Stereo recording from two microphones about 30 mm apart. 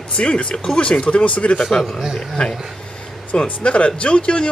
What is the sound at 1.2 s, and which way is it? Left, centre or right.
Speech, left.